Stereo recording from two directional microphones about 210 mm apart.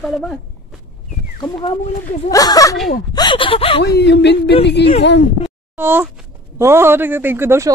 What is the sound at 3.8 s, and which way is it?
Speech, 50° left (ahead or behind).